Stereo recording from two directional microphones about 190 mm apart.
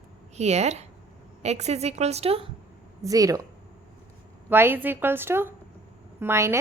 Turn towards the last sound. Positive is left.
turn(degrees=-15)  # may be behind; listen again after turning